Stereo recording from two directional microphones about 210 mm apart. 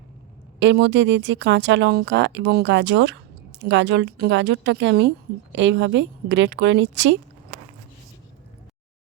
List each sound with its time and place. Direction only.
0.6 s a woman's voice: 55° right (ahead or behind)